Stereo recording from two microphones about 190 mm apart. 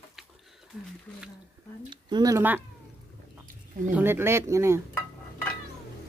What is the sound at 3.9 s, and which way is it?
Speech, 10° right (ahead or behind).